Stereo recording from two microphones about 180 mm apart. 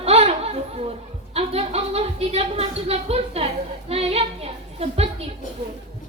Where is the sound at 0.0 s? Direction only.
35° right (ahead or behind).